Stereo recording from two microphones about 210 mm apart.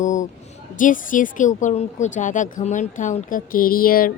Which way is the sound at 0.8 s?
40° left (ahead or behind).